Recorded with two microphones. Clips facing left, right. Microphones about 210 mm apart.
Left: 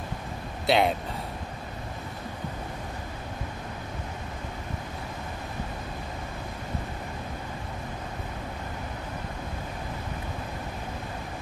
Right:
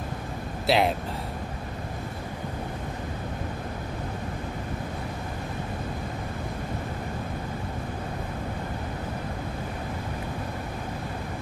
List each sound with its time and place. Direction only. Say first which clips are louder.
0.7 s speech: even; centre (ahead or behind)